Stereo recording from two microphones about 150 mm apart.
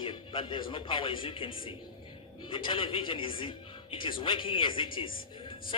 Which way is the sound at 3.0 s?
35° left (ahead or behind).